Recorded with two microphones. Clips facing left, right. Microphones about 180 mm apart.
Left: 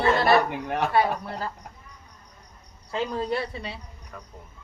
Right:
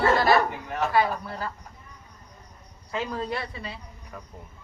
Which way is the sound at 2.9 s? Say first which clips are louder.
Left 3 dB; 30° left (ahead or behind).